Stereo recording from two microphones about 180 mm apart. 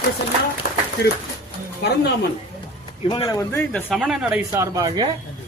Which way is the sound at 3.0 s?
25° left (ahead or behind).